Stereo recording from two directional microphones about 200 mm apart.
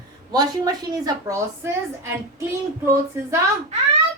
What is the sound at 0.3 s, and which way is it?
Speech, 20° right (ahead or behind).